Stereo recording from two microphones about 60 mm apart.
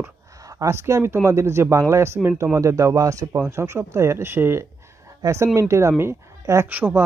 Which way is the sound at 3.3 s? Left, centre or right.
Right.